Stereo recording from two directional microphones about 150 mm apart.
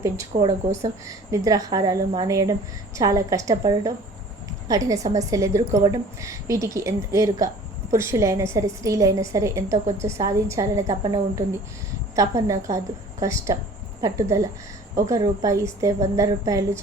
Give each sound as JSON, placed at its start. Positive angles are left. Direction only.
{"t": 1.5, "sound": "speech", "side_deg": -25}